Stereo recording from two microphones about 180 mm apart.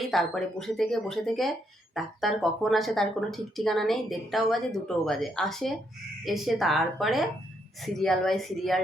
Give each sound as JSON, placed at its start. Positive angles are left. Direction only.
{"t": 0.0, "sound": "speech", "side_deg": 0}